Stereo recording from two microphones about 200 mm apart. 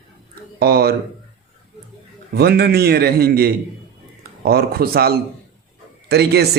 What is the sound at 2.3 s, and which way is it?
A man's voice, 55° right (ahead or behind).